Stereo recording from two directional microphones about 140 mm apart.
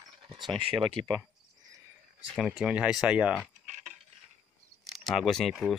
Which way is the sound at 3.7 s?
55° right (ahead or behind).